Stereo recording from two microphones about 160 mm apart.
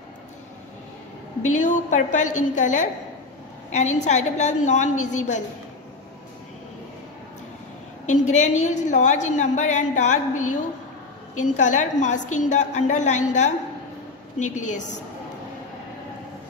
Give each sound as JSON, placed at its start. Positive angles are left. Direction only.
{"t": 1.5, "sound": "a woman's voice", "side_deg": 50}
{"t": 8.1, "sound": "a woman's voice", "side_deg": 45}
{"t": 11.3, "sound": "a woman's voice", "side_deg": 50}